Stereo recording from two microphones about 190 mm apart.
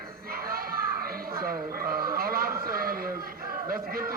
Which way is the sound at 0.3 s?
50° right (ahead or behind).